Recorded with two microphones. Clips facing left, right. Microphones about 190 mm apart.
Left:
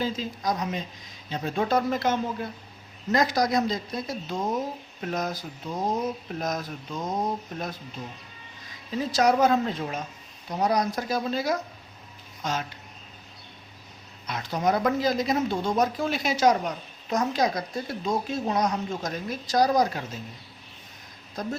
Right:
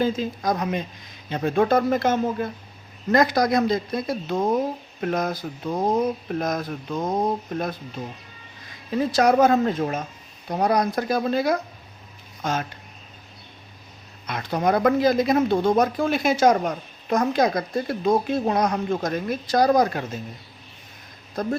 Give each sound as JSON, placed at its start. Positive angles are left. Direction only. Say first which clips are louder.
{"t": 0.0, "sound": "speech", "louder": "right 5 dB", "side_deg": -55}
{"t": 8.9, "sound": "speech", "louder": "right 4 dB", "side_deg": -55}
{"t": 14.3, "sound": "speech", "louder": "right 3 dB", "side_deg": -55}
{"t": 21.4, "sound": "speech", "louder": "right 6 dB", "side_deg": -55}